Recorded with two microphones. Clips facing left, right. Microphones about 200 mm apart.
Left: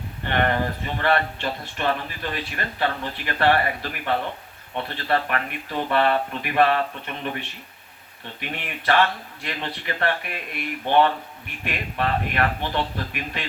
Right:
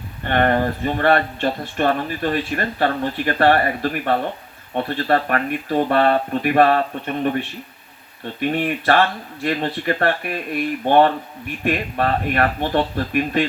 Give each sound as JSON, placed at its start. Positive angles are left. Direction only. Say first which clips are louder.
{"t": 0.3, "sound": "speech", "louder": "right 5 dB", "side_deg": -45}